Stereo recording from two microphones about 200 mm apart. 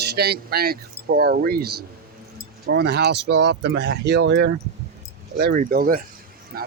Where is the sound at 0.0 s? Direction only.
55° right (ahead or behind).